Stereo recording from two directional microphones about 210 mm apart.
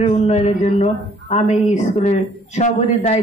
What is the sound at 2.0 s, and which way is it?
A man's voice, 35° left (ahead or behind).